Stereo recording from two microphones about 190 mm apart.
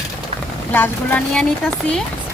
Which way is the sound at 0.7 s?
10° left (ahead or behind).